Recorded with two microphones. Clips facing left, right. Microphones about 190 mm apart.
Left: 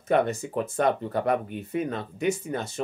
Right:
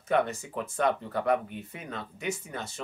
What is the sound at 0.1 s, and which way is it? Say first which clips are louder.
Speech: left 4 dB; 45° left (ahead or behind).